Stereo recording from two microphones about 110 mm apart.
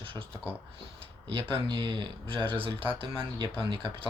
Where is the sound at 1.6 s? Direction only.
45° right (ahead or behind).